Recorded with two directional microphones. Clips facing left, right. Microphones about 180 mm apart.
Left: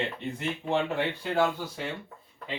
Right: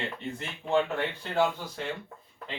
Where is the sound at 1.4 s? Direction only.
5° left (ahead or behind).